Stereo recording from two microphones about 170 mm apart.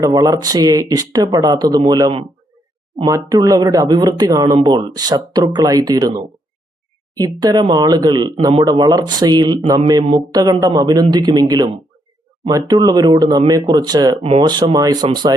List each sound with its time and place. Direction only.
0.0 s speech: 20° right (ahead or behind)
14.2 s speech: 35° right (ahead or behind)